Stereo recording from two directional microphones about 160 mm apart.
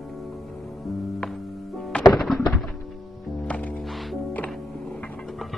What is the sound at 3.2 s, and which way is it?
Music, 10° left (ahead or behind).